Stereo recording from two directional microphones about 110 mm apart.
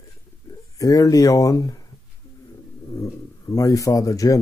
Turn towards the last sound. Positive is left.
turn(degrees=30)  # may be behind; listen again after turning